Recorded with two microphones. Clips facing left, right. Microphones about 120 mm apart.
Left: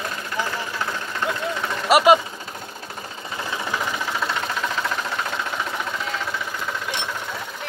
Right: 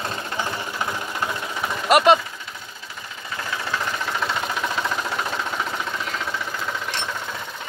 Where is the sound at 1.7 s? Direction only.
5° left (ahead or behind).